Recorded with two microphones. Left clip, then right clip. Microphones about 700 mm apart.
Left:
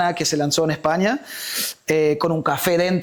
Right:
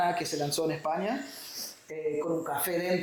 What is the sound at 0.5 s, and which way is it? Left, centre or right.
Speech, left.